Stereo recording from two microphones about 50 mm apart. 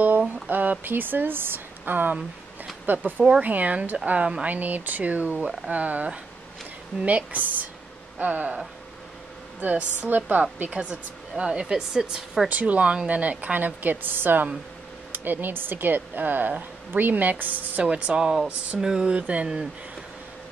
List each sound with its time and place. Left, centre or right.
0.5 s speech: right
4.5 s speech: right
9.6 s speech: right
11.6 s speech: centre
12.4 s speech: right
17.8 s speech: centre